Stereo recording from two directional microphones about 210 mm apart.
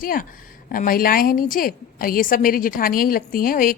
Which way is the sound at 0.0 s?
40° left (ahead or behind).